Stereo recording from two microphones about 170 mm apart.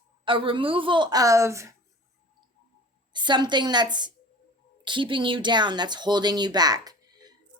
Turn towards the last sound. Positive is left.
turn(degrees=-25)  # may be behind; listen again after turning